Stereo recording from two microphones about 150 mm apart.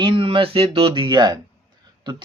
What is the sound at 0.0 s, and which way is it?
Speech, 35° right (ahead or behind).